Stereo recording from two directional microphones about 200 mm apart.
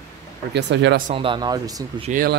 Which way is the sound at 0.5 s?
60° right (ahead or behind).